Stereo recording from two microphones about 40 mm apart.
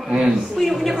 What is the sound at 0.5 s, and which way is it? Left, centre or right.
Speech, centre.